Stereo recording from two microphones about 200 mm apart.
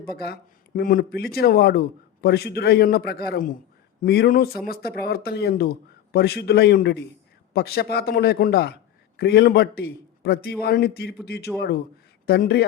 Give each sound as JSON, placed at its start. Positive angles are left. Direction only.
{"t": 0.0, "sound": "a man's voice", "side_deg": 50}